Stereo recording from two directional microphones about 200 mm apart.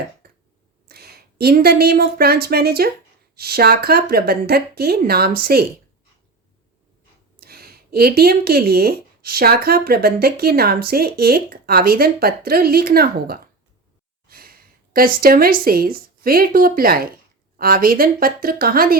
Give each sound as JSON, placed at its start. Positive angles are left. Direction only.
{"t": 0.2, "sound": "a sound", "side_deg": -50}
{"t": 0.9, "sound": "a woman's voice", "side_deg": -50}
{"t": 7.3, "sound": "a woman's voice", "side_deg": -50}